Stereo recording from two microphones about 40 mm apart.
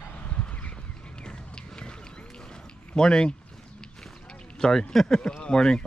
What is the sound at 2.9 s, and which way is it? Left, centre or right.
Speech, left.